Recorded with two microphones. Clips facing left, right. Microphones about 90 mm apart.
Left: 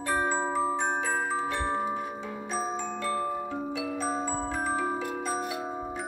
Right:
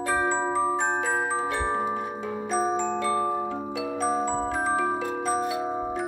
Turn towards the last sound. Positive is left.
turn(degrees=-30)  # may be behind; listen again after turning